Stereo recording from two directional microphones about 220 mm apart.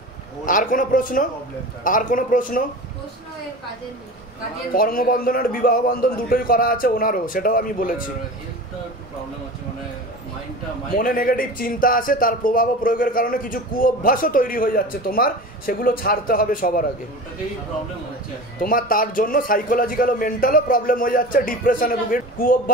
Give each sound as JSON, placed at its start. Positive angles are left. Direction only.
{"t": 0.5, "sound": "speech", "side_deg": 40}
{"t": 4.7, "sound": "speech", "side_deg": 40}
{"t": 10.9, "sound": "speech", "side_deg": 40}
{"t": 18.6, "sound": "speech", "side_deg": 40}